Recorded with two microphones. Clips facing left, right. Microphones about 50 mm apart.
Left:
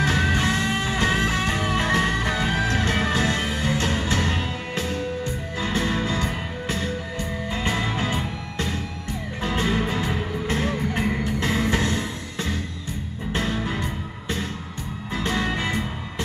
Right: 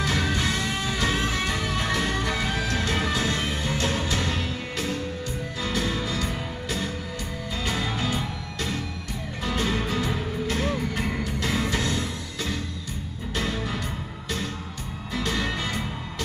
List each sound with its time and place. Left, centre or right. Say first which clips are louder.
0.0 s music: left 4 dB; left
15.1 s music: left 3 dB; left